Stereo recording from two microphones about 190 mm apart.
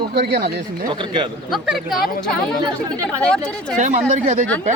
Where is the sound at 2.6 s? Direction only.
20° right (ahead or behind).